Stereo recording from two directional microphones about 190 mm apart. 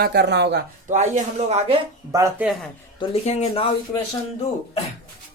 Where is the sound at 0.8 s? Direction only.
40° right (ahead or behind).